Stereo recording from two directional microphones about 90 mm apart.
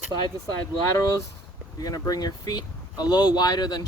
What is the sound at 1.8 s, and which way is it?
Speech, 45° left (ahead or behind).